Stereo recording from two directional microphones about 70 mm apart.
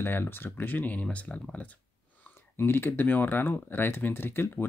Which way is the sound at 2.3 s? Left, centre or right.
Left.